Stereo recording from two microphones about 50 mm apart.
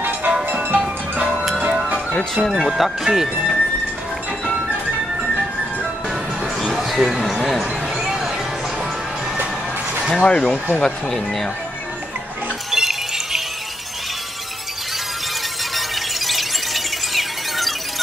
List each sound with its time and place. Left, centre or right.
0.3 s music: right
2.1 s speech: centre
2.6 s speech: centre
3.3 s music: right
6.7 s a sound: centre
10.1 s speech: centre
12.7 s music: centre
15.7 s music: centre